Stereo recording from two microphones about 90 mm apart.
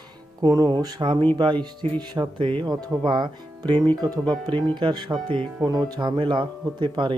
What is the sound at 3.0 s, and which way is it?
Speech, 60° right (ahead or behind).